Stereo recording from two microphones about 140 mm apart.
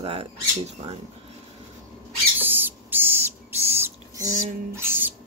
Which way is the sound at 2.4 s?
15° right (ahead or behind).